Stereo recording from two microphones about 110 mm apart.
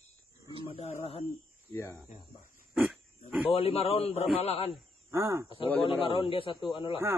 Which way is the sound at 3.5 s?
65° left (ahead or behind).